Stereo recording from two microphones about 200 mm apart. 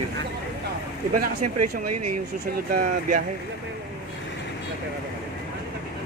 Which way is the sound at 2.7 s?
45° right (ahead or behind).